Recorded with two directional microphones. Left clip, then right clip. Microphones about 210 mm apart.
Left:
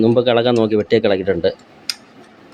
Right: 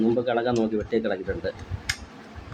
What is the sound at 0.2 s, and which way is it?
Speech, 40° left (ahead or behind).